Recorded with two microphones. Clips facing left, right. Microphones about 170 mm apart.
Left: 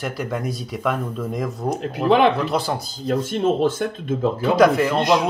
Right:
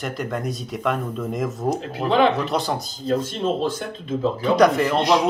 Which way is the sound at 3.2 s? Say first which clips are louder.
Left 4 dB; 55° left (ahead or behind).